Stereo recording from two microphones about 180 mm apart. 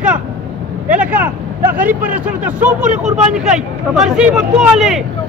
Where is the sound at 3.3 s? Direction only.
5° right (ahead or behind).